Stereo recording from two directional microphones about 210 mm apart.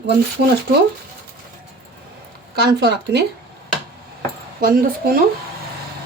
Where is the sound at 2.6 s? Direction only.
50° right (ahead or behind).